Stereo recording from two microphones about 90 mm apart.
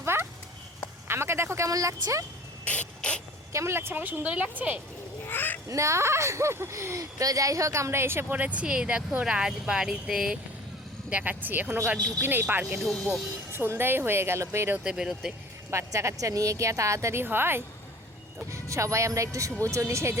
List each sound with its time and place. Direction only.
0.0 s clip-clop: 30° right (ahead or behind)
1.0 s speech: 25° right (ahead or behind)
2.6 s a sound: 15° left (ahead or behind)
3.5 s speech: 30° right (ahead or behind)
5.2 s a sound: 20° left (ahead or behind)
5.6 s speech: 35° right (ahead or behind); by 10.3 s 5° right (ahead or behind)
11.1 s speech: 15° right (ahead or behind)
12.8 s speech: 5° left (ahead or behind)
13.5 s speech: 25° right (ahead or behind)
14.8 s speech: 10° right (ahead or behind)
15.7 s a woman's voice: 35° right (ahead or behind)